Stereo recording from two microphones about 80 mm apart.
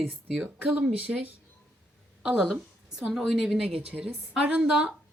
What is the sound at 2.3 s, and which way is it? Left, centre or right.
Speech, centre.